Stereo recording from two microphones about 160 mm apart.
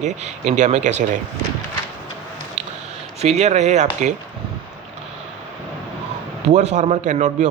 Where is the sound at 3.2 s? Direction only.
45° right (ahead or behind).